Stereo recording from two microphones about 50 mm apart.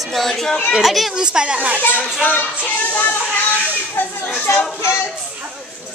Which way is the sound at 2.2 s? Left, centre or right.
Left.